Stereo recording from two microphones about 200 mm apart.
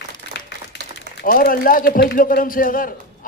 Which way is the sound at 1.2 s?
45° left (ahead or behind).